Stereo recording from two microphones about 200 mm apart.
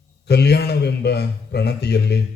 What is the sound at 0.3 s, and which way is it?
A man's voice, 55° left (ahead or behind).